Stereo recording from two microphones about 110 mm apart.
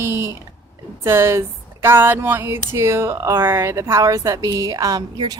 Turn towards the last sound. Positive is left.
turn(degrees=-35)  # may be behind; listen again after turning